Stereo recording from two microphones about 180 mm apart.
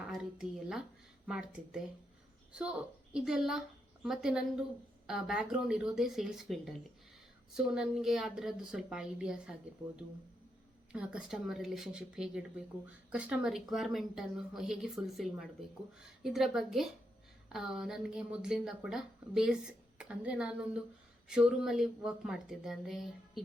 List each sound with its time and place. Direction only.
0.0 s speech: 5° right (ahead or behind)